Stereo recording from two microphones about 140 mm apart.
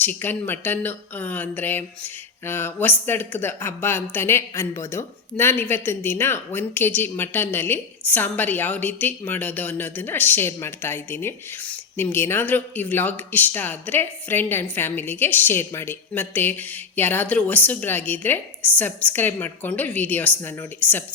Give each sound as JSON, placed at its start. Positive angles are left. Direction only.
{"t": 0.0, "sound": "a woman's voice", "side_deg": 15}